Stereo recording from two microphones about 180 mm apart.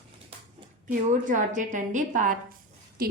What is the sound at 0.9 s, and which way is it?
A woman's voice, 45° right (ahead or behind).